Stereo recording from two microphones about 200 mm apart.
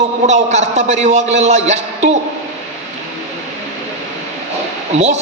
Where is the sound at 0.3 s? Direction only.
35° right (ahead or behind).